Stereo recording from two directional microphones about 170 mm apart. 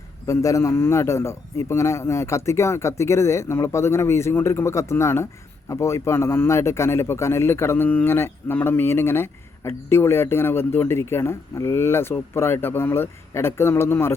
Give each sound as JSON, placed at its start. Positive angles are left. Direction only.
{"t": 0.3, "sound": "a man's voice", "side_deg": 20}